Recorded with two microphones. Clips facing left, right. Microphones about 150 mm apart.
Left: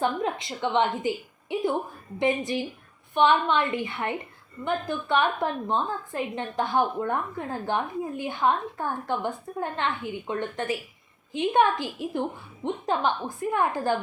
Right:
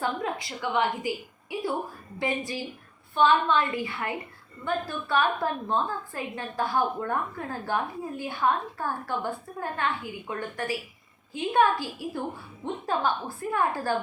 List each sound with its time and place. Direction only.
0.0 s a woman's voice: 20° left (ahead or behind)